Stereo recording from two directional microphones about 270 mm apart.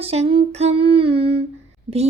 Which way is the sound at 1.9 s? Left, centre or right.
Right.